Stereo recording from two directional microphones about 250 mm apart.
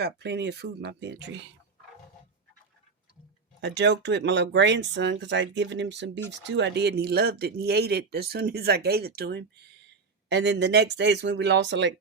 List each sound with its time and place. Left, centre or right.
0.0 s speech: right
3.6 s speech: right